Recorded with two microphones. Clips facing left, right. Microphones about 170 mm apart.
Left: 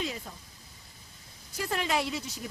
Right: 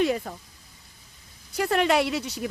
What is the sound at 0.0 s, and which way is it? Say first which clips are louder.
Speech: right 12 dB; 65° right (ahead or behind).